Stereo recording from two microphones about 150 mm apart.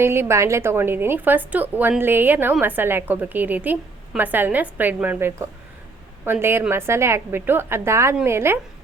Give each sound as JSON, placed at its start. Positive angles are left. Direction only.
{"t": 0.0, "sound": "a woman's voice", "side_deg": -15}